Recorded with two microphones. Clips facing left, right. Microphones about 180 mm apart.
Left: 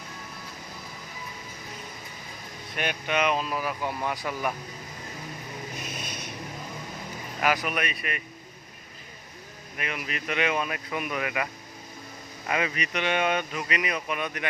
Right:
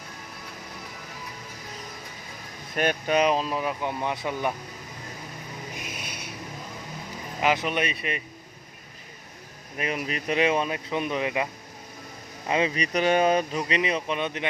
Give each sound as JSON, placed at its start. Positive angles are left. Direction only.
{"t": 2.7, "sound": "speech", "side_deg": -40}
{"t": 5.7, "sound": "a sound", "side_deg": -10}
{"t": 7.4, "sound": "speech", "side_deg": -25}
{"t": 9.7, "sound": "speech", "side_deg": -35}
{"t": 12.5, "sound": "speech", "side_deg": -25}